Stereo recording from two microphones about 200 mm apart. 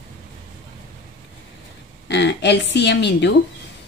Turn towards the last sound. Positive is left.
turn(degrees=60)  # may be behind; listen again after turning